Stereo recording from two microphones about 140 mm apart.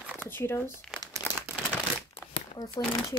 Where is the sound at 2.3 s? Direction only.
40° left (ahead or behind).